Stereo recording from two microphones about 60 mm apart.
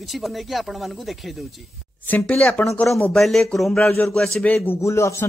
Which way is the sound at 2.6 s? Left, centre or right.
Left.